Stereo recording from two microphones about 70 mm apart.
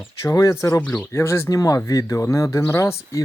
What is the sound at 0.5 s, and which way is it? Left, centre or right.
Speech, left.